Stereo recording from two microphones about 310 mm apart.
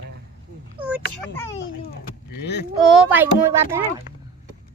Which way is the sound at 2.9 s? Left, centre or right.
Centre.